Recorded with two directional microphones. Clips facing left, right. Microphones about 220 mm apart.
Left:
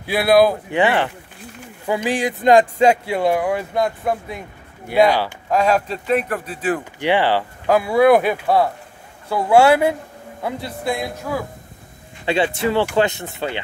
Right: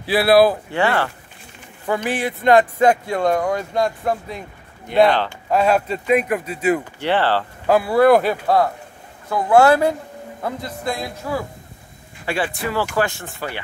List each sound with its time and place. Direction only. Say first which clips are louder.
0.1 s speech: right 1 dB; centre (ahead or behind)
0.7 s speech: left 2 dB; 15° left (ahead or behind)
5.5 s speech: right 1 dB; 5° right (ahead or behind)
7.0 s speech: left 1 dB; 15° left (ahead or behind)
7.6 s speech: even; centre (ahead or behind)
12.3 s speech: left 5 dB; 25° left (ahead or behind)